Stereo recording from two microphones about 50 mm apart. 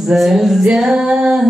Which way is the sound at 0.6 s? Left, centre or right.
Centre.